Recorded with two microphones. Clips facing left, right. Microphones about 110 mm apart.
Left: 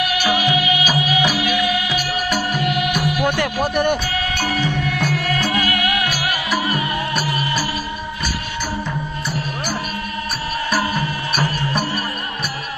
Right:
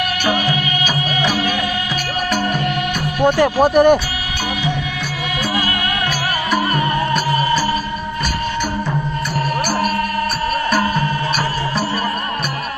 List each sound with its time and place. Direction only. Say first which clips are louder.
0.3 s music: left 1 dB; 40° right (ahead or behind)
3.0 s speech: right 5 dB; 35° right (ahead or behind)
5.5 s music: even; 30° right (ahead or behind)
6.6 s music: right 4 dB; 40° right (ahead or behind)